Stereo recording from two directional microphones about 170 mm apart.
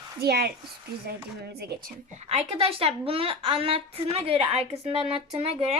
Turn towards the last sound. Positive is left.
turn(degrees=-35)  # may be behind; listen again after turning